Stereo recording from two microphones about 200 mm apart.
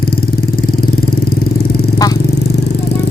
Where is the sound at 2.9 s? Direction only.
55° left (ahead or behind).